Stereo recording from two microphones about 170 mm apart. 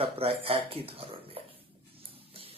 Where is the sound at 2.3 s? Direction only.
35° right (ahead or behind).